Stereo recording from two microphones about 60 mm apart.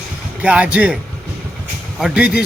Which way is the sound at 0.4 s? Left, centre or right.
Right.